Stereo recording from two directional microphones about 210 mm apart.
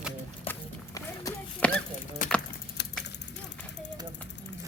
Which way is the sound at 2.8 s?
55° left (ahead or behind).